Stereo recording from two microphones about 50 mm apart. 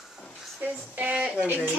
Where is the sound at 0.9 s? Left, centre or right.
Right.